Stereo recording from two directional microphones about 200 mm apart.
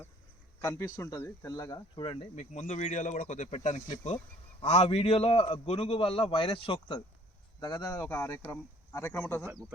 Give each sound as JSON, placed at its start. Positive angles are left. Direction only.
{"t": 0.6, "sound": "speech", "side_deg": 15}
{"t": 2.3, "sound": "a man's voice", "side_deg": 35}